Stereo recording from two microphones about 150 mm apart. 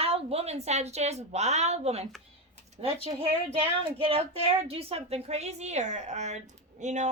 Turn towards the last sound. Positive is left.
turn(degrees=-50)  # may be behind; listen again after turning